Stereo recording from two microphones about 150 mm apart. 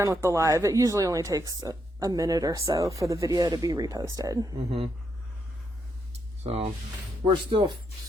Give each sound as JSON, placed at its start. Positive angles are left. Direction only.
{"t": 0.0, "sound": "speech", "side_deg": -20}
{"t": 4.5, "sound": "speech", "side_deg": -40}
{"t": 6.4, "sound": "speech", "side_deg": -45}